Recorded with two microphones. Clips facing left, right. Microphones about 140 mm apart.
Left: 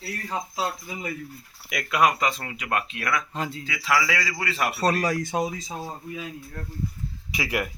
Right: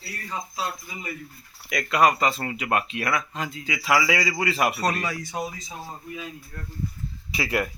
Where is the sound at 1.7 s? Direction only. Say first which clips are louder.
Right 2 dB; 5° left (ahead or behind).